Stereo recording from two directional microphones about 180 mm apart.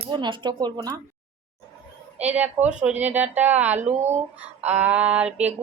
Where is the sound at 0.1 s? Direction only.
25° right (ahead or behind).